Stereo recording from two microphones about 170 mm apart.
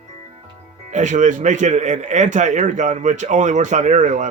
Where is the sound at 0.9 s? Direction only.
45° right (ahead or behind).